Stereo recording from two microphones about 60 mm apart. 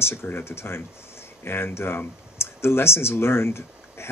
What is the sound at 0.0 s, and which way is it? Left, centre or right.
Speech, left.